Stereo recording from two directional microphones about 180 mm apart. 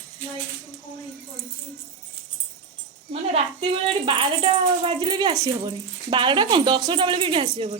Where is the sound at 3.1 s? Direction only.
35° right (ahead or behind).